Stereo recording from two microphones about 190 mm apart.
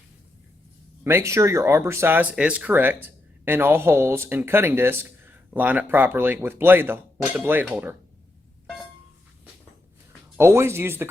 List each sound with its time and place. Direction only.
1.0 s speech: 15° right (ahead or behind)
10.3 s speech: 15° right (ahead or behind)